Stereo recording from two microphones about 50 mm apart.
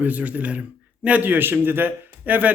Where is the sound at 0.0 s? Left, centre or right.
Right.